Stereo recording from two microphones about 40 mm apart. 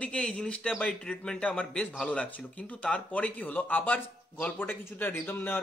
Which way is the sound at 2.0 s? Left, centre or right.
Left.